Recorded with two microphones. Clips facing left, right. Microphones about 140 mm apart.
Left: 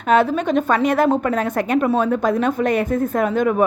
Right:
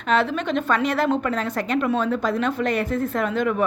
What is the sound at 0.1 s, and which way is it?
A woman's voice, 45° left (ahead or behind).